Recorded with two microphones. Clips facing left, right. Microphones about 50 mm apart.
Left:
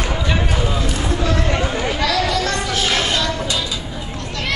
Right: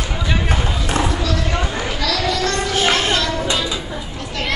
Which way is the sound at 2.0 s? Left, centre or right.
Centre.